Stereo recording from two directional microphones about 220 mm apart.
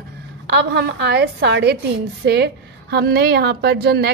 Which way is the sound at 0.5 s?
50° right (ahead or behind).